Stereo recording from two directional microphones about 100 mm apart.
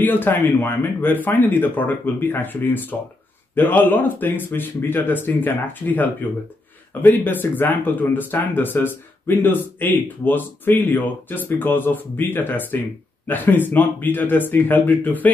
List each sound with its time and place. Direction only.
0.0 s speech: 20° left (ahead or behind)